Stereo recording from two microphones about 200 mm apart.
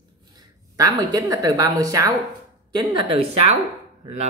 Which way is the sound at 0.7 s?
20° right (ahead or behind).